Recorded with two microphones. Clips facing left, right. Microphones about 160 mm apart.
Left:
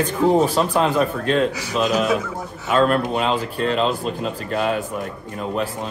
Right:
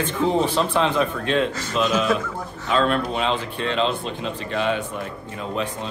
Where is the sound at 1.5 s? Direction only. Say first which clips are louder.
Left 1 dB; 10° left (ahead or behind).